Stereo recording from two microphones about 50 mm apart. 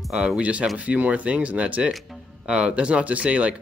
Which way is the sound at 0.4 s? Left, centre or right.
Right.